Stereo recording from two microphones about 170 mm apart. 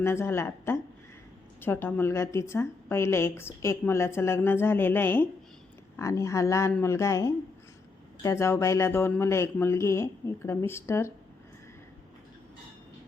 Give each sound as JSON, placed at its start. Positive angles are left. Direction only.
{"t": 0.0, "sound": "a woman's voice", "side_deg": 15}